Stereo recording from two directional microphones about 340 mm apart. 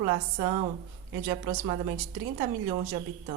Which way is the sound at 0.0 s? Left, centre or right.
Centre.